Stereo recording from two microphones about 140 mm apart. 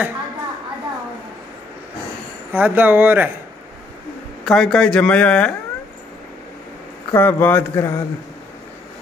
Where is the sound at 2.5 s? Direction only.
10° right (ahead or behind).